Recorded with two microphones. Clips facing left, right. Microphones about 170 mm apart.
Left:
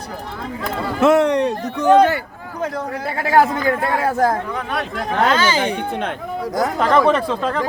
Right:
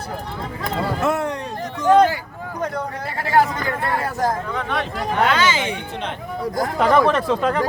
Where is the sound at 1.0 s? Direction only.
85° left; by 2.1 s 70° left (ahead or behind).